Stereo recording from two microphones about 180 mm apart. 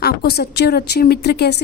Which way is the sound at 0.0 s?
60° left (ahead or behind).